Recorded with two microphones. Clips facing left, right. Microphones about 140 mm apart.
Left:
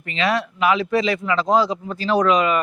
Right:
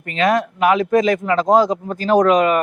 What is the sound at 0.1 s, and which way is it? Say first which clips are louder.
Speech: right 5 dB; 50° right (ahead or behind).